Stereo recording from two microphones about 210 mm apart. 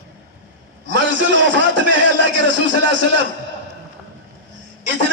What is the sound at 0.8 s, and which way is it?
A man's voice, 60° right (ahead or behind).